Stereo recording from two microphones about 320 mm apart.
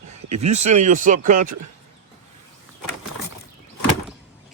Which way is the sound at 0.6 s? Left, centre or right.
Right.